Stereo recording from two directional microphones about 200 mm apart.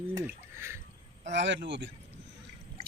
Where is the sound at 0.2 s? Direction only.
15° right (ahead or behind).